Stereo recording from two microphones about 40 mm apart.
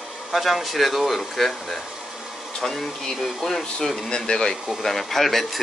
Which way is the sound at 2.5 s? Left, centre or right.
Centre.